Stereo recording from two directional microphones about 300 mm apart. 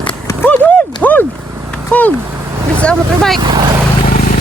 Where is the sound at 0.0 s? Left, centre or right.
Centre.